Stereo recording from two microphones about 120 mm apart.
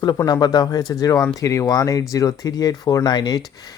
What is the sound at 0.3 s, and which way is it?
A man's voice, 35° left (ahead or behind).